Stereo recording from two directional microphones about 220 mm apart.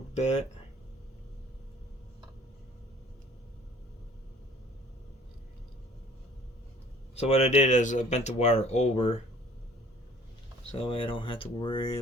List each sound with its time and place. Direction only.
7.2 s speech: 30° left (ahead or behind)
10.7 s speech: 25° left (ahead or behind)